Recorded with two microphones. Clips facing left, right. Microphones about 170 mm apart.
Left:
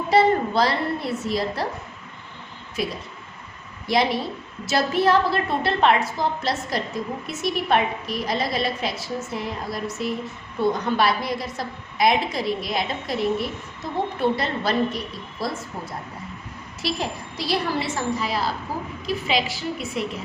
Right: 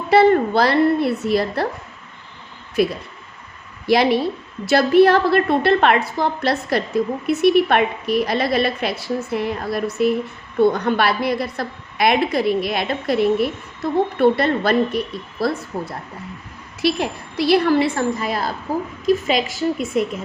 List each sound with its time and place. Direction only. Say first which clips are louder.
0.1 s a woman's voice: right 5 dB; 60° right (ahead or behind)
2.8 s a woman's voice: right 9 dB; 60° right (ahead or behind)
16.8 s a woman's voice: right 7 dB; 60° right (ahead or behind)